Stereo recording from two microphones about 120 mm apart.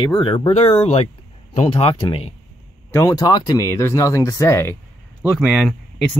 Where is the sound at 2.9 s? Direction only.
30° left (ahead or behind).